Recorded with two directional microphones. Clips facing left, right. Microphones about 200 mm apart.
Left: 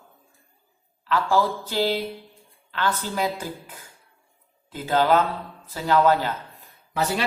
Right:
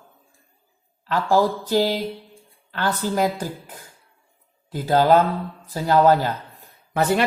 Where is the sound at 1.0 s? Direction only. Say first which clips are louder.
Right 3 dB; 45° right (ahead or behind).